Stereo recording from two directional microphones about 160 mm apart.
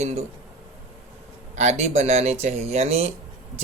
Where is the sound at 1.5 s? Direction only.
45° right (ahead or behind).